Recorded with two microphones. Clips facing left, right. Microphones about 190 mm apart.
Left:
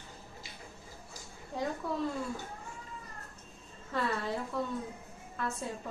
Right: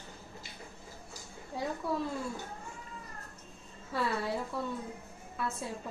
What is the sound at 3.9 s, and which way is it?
Speech, 10° right (ahead or behind).